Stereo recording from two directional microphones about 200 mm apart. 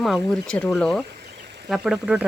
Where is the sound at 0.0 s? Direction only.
5° left (ahead or behind).